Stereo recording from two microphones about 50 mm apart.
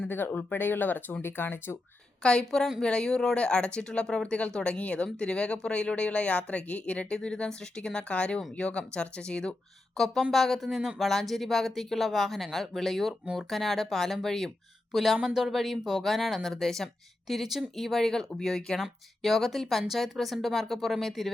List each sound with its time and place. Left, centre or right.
0.3 s speech: left
2.2 s speech: centre
10.3 s a woman's voice: centre